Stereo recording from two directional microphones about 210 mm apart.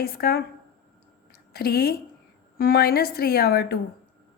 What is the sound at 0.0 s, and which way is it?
Speech, 45° left (ahead or behind).